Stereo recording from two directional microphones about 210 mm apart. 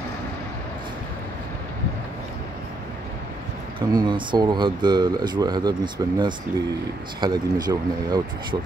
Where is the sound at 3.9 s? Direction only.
20° right (ahead or behind).